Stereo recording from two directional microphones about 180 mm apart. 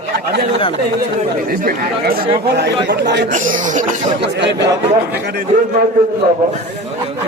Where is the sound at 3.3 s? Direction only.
45° right (ahead or behind).